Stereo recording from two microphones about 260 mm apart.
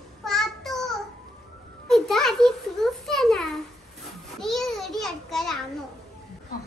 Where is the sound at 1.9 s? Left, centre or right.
Centre.